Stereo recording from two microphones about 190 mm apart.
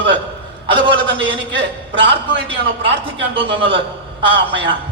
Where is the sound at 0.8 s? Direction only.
25° right (ahead or behind).